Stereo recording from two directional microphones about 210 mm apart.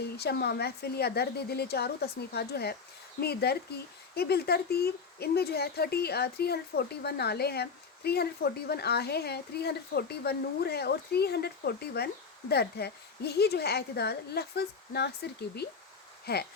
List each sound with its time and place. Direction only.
0.2 s speech: 50° left (ahead or behind)